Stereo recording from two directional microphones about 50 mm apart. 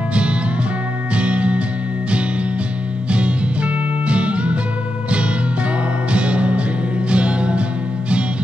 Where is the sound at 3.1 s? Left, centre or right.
Right.